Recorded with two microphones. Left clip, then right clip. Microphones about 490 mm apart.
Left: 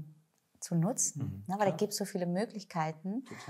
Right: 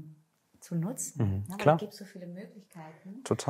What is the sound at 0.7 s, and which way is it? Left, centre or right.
Speech, left.